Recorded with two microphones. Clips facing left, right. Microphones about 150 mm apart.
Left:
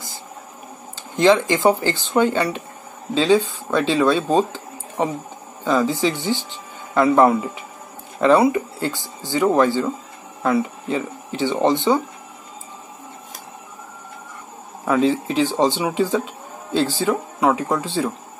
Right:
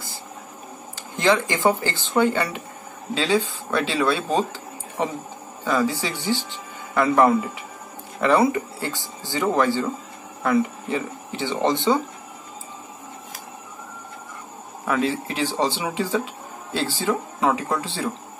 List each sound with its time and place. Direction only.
1.1 s speech: 20° left (ahead or behind)
14.9 s speech: 20° left (ahead or behind)